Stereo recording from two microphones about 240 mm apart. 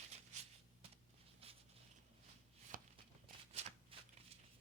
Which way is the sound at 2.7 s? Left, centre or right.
Right.